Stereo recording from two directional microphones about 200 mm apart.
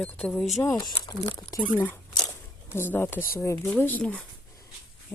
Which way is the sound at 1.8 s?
10° left (ahead or behind).